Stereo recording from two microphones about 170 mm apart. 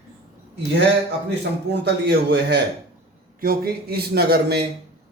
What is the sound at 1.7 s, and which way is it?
Speech, 85° right.